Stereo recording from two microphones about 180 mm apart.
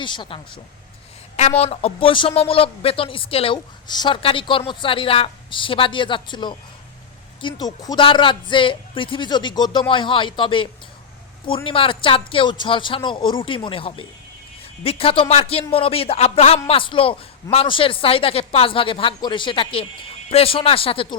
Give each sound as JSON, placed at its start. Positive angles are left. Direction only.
{"t": 0.0, "sound": "speech", "side_deg": 25}